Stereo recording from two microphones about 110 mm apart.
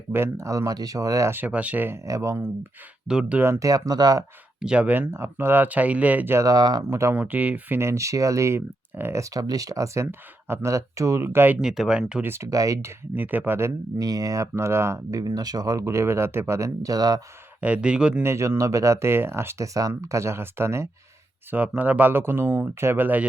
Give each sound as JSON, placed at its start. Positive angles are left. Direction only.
{"t": 0.1, "sound": "speech", "side_deg": -25}
{"t": 2.0, "sound": "speech", "side_deg": -30}
{"t": 3.1, "sound": "speech", "side_deg": -10}
{"t": 3.4, "sound": "speech", "side_deg": -30}
{"t": 4.6, "sound": "speech", "side_deg": -10}
{"t": 6.9, "sound": "speech", "side_deg": -25}
{"t": 7.2, "sound": "speech", "side_deg": -15}
{"t": 11.6, "sound": "speech", "side_deg": -5}
{"t": 12.2, "sound": "speech", "side_deg": -25}
{"t": 13.1, "sound": "speech", "side_deg": -15}
{"t": 17.6, "sound": "speech", "side_deg": -10}
{"t": 18.2, "sound": "speech", "side_deg": -25}